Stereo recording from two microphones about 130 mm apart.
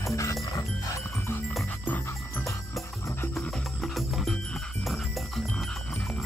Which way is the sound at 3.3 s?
Centre (ahead or behind).